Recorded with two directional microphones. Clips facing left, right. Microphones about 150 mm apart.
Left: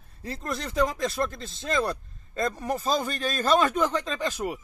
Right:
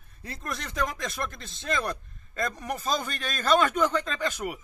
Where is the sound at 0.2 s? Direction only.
30° left (ahead or behind).